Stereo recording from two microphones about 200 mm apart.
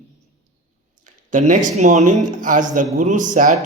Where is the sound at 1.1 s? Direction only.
40° right (ahead or behind).